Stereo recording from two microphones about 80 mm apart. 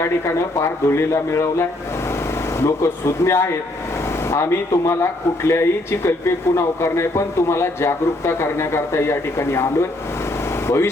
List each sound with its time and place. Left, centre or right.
0.0 s a man's voice: left
10.7 s a man's voice: left